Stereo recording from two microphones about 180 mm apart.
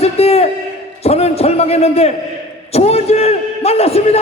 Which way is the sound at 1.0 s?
35° left (ahead or behind).